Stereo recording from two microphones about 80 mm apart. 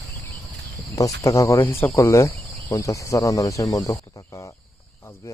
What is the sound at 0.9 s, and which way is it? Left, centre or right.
Speech, left.